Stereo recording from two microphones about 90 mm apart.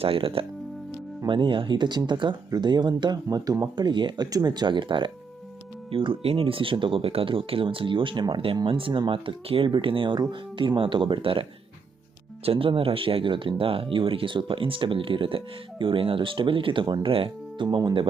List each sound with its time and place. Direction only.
0.0 s speech: 85° right
1.3 s speech: 65° right (ahead or behind)
3.2 s speech: 40° right (ahead or behind); by 4.3 s 60° right (ahead or behind)
4.3 s speech: 45° right (ahead or behind); by 5.1 s 65° right (ahead or behind)
5.9 s speech: 80° right
12.5 s speech: 90° right; by 17.1 s 60° right (ahead or behind)
17.1 s speech: 80° right; by 17.9 s 55° right (ahead or behind)